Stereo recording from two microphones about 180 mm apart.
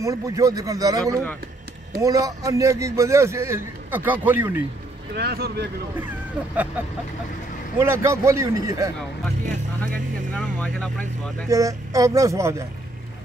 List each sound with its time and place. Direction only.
0.0 s a man's voice: 15° right (ahead or behind)
5.1 s speech: 60° right (ahead or behind)
5.9 s a man's voice: 10° right (ahead or behind)
7.8 s a man's voice: 15° right (ahead or behind)
10.3 s speech: 5° left (ahead or behind)
11.4 s a man's voice: 20° right (ahead or behind)